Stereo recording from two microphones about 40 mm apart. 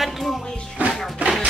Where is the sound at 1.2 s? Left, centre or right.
Right.